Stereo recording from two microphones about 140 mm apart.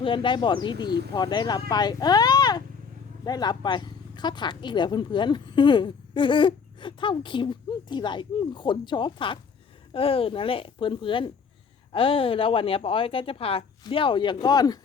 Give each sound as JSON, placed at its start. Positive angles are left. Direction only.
{"t": 0.0, "sound": "speech", "side_deg": 35}